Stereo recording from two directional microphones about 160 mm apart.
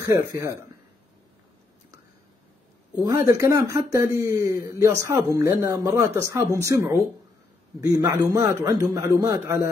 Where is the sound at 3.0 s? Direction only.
20° right (ahead or behind).